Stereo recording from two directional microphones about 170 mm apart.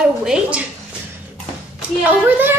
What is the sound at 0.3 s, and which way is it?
Speech, 5° right (ahead or behind).